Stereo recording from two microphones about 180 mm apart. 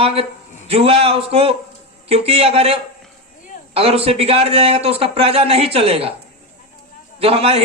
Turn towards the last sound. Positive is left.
turn(degrees=-35)  # may be behind; listen again after turning